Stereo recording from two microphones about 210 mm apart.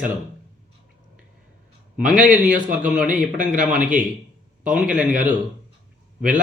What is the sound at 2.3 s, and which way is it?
Speech, 5° right (ahead or behind).